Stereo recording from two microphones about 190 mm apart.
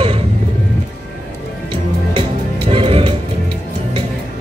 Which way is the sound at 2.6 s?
30° right (ahead or behind).